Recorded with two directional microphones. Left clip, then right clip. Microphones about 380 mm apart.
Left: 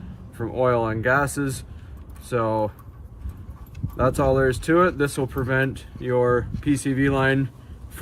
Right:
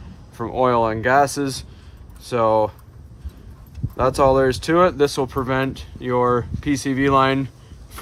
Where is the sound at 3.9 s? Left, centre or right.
Centre.